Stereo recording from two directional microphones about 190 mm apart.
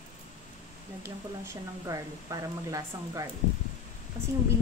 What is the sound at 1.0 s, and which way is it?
Speech, 15° right (ahead or behind).